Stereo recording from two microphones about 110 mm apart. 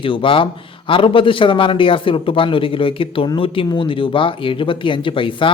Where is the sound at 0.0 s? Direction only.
50° left (ahead or behind).